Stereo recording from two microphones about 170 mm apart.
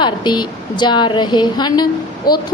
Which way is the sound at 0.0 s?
25° left (ahead or behind).